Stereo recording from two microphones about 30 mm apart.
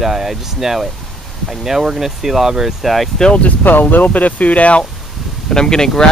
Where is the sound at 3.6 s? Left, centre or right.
Left.